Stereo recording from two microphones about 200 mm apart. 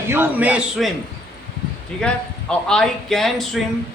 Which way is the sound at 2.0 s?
5° left (ahead or behind).